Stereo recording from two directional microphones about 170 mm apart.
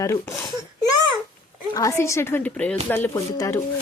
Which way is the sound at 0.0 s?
20° left (ahead or behind).